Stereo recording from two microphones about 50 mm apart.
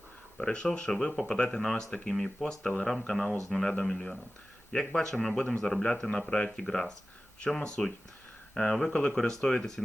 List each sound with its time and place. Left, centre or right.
0.3 s speech: centre
5.8 s speech: centre